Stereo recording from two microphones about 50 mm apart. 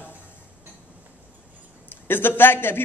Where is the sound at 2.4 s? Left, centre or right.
Left.